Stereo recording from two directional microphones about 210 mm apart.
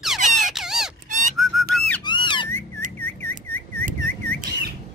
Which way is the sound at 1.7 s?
Centre (ahead or behind).